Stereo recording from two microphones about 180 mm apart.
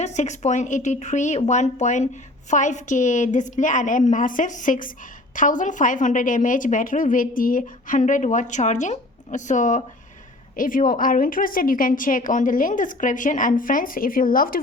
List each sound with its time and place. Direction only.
0.0 s a woman's voice: 40° left (ahead or behind)